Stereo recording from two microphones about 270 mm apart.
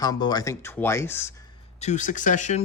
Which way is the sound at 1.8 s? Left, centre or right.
Left.